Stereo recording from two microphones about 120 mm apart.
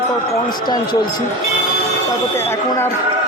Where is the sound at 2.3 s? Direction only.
20° left (ahead or behind).